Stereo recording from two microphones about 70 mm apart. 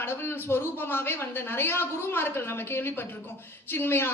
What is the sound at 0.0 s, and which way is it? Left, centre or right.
Speech, left.